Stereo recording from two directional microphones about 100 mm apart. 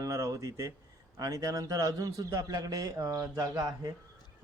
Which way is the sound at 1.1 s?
35° right (ahead or behind).